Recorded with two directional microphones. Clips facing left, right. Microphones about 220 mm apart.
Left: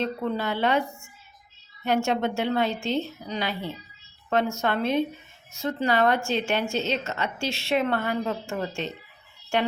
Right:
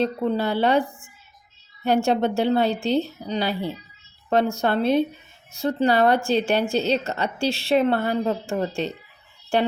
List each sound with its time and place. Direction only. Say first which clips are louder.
0.0 s a woman's voice: right 5 dB; 35° right (ahead or behind)